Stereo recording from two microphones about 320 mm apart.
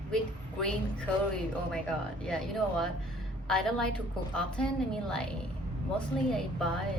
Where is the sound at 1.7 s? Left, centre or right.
Centre.